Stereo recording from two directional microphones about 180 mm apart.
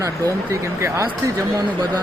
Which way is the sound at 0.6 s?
15° right (ahead or behind).